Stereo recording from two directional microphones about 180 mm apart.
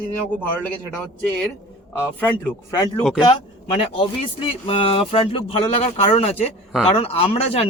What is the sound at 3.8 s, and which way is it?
Speech, 30° left (ahead or behind).